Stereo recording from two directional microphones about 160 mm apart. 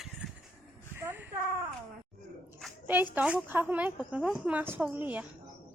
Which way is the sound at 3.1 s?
10° right (ahead or behind).